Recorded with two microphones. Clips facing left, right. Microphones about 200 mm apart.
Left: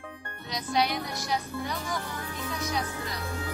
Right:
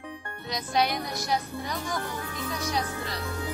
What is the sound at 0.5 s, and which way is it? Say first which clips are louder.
Music: right 1 dB; 50° right (ahead or behind).